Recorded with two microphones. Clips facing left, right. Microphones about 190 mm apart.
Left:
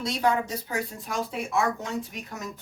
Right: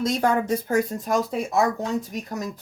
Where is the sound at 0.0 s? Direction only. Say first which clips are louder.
Right 4 dB; 50° right (ahead or behind).